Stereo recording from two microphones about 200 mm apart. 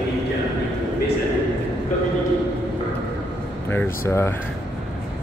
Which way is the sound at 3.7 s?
10° left (ahead or behind).